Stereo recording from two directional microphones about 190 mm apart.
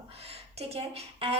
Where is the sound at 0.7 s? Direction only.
30° right (ahead or behind).